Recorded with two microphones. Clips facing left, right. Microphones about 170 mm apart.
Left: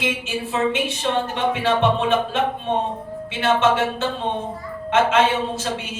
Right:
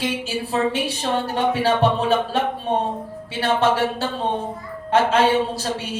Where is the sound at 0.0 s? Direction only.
35° right (ahead or behind).